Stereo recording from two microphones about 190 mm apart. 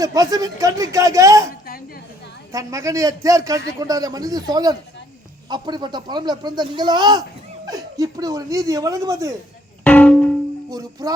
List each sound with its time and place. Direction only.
0.0 s speech: 20° right (ahead or behind)
2.5 s speech: 15° right (ahead or behind)
9.8 s music: 10° left (ahead or behind)
10.7 s speech: 20° right (ahead or behind)